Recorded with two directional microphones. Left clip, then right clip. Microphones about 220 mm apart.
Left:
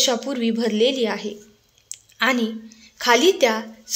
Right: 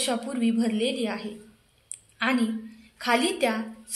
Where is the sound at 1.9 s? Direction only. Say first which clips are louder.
Left 6 dB; 35° left (ahead or behind).